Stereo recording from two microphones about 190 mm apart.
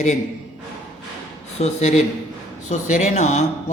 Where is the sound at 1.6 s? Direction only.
35° left (ahead or behind).